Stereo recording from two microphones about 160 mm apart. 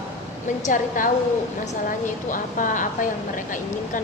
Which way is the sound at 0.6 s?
55° left (ahead or behind).